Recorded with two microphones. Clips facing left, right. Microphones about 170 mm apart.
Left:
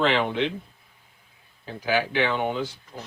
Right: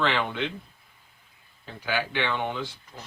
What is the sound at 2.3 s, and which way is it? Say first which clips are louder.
Speech: left 3 dB; 10° left (ahead or behind).